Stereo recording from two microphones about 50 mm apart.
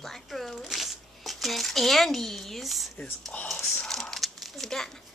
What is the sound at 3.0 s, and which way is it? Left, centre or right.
Speech, left.